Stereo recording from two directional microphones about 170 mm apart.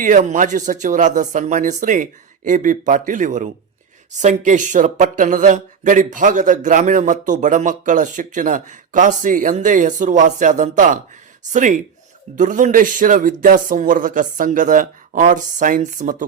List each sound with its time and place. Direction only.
0.0 s speech: 50° right (ahead or behind)